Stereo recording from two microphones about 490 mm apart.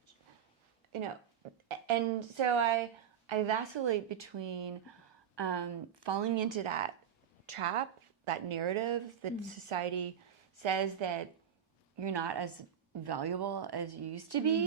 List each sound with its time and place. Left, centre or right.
1.6 s a woman's voice: right
10.6 s speech: right